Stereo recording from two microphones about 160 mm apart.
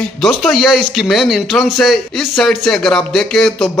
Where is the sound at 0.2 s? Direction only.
Centre (ahead or behind).